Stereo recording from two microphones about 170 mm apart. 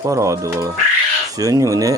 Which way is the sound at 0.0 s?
20° right (ahead or behind).